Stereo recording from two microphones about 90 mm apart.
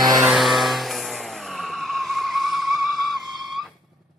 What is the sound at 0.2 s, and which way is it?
Vehicle, centre (ahead or behind).